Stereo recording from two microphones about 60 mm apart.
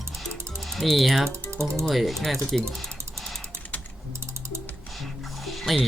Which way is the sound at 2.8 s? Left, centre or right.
Centre.